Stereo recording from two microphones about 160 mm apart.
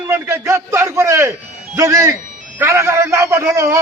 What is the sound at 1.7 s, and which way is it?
A man's voice, 20° right (ahead or behind).